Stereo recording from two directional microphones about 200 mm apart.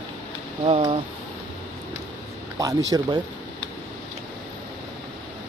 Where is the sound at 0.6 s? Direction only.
25° right (ahead or behind).